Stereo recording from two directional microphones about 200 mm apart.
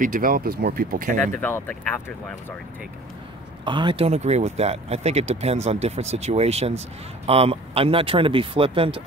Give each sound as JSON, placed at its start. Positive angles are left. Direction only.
{"t": 0.0, "sound": "speech", "side_deg": -45}
{"t": 1.4, "sound": "speech", "side_deg": 5}
{"t": 3.6, "sound": "speech", "side_deg": -25}